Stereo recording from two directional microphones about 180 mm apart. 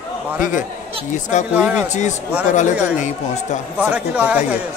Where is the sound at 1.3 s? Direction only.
40° left (ahead or behind).